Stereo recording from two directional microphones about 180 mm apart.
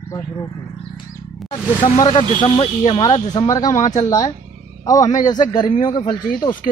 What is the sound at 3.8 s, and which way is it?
Speech, 40° left (ahead or behind).